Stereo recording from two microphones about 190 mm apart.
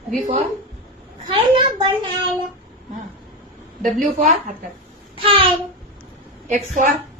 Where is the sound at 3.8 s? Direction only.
45° right (ahead or behind).